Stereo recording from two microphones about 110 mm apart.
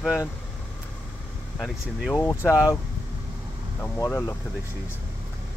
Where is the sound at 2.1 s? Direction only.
25° left (ahead or behind).